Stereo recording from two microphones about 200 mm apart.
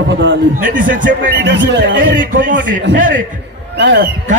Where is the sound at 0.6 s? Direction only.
40° right (ahead or behind).